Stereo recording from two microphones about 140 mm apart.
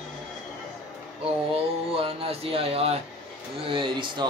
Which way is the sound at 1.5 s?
45° right (ahead or behind).